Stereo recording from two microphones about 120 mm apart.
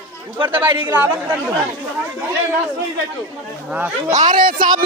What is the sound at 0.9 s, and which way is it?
Speech, 15° right (ahead or behind).